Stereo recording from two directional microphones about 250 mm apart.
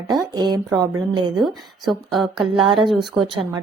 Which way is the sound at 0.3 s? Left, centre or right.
Centre.